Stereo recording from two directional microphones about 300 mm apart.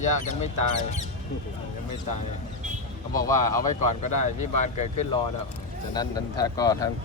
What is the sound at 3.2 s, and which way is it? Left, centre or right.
Speech, centre.